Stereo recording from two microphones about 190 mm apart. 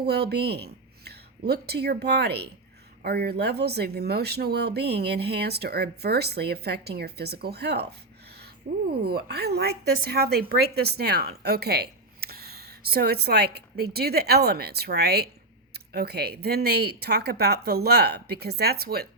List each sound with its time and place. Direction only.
0.0 s speech: 55° right (ahead or behind)
9.0 s speech: 55° right (ahead or behind)